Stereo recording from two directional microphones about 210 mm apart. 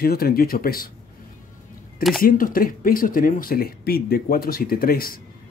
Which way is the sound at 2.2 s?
45° left (ahead or behind).